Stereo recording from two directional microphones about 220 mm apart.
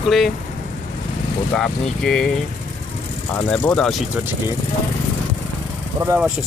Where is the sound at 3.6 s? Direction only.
5° left (ahead or behind).